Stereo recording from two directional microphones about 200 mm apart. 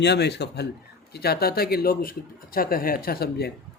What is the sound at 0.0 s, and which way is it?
A man's voice, 55° left (ahead or behind).